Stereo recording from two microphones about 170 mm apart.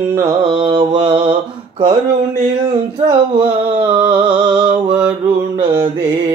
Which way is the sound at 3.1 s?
30° right (ahead or behind).